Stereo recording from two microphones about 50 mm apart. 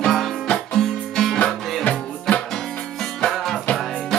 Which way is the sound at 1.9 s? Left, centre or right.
Left.